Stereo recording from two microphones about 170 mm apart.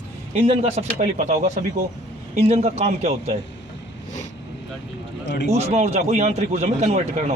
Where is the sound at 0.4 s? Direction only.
35° right (ahead or behind).